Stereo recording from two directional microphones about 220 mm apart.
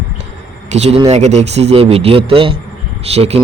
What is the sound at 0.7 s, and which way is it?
A man's voice, 30° right (ahead or behind).